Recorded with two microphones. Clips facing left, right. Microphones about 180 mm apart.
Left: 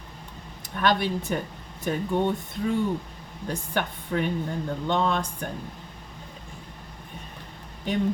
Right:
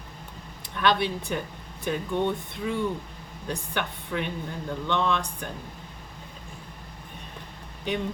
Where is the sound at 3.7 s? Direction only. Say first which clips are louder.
Left 4 dB; 45° left (ahead or behind).